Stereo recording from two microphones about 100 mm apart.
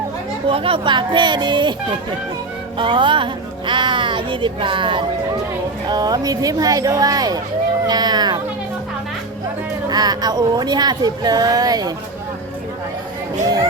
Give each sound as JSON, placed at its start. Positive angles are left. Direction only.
{"t": 0.4, "sound": "speech", "side_deg": -65}
{"t": 2.7, "sound": "speech", "side_deg": -55}
{"t": 5.9, "sound": "speech", "side_deg": -40}
{"t": 7.9, "sound": "a sound", "side_deg": -45}
{"t": 9.9, "sound": "speech", "side_deg": -45}